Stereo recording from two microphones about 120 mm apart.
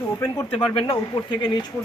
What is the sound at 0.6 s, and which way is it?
Speech, 45° left (ahead or behind).